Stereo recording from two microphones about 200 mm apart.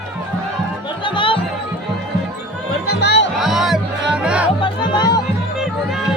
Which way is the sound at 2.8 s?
75° left (ahead or behind).